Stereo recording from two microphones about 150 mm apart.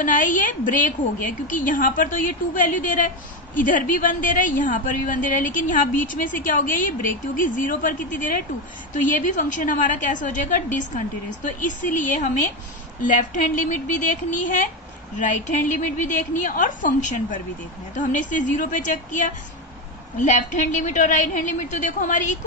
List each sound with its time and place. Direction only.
0.0 s a woman's voice: 60° left (ahead or behind)